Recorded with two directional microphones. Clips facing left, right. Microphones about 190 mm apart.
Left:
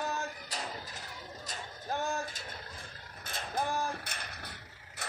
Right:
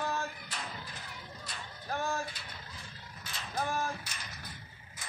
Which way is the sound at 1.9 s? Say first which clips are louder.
Even; 20° left (ahead or behind).